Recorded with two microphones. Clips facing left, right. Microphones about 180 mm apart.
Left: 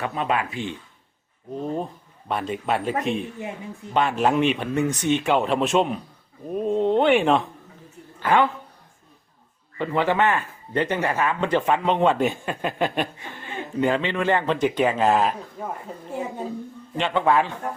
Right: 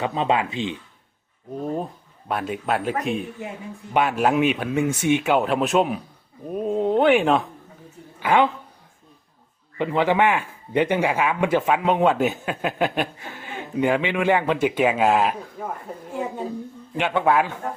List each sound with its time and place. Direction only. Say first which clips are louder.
0.0 s speech: right 3 dB; 25° right (ahead or behind)
1.5 s speech: right 1 dB; 5° right (ahead or behind)
8.2 s speech: right 1 dB; 10° right (ahead or behind)
9.7 s speech: right 2 dB; 15° right (ahead or behind)
17.0 s speech: right 1 dB; 5° right (ahead or behind)